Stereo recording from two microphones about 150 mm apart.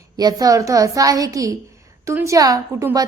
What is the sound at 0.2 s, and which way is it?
A woman's voice, 25° right (ahead or behind).